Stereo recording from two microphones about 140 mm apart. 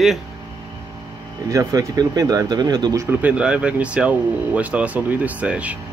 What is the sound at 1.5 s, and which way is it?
Speech, 25° right (ahead or behind).